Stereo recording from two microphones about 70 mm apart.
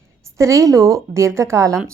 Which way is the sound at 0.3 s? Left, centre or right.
Right.